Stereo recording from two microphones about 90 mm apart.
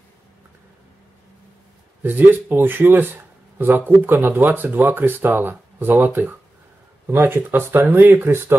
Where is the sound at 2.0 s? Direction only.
20° right (ahead or behind).